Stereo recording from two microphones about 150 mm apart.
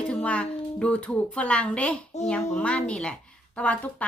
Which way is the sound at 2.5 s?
10° left (ahead or behind).